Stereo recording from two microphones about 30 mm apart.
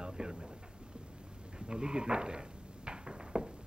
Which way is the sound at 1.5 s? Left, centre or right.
Right.